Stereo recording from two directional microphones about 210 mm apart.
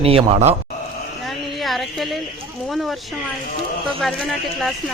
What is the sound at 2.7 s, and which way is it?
Speech, centre (ahead or behind).